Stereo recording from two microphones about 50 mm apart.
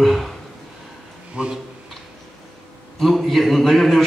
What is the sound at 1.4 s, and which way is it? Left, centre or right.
Speech, centre.